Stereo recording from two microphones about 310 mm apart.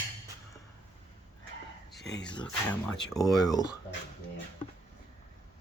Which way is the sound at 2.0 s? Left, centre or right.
Left.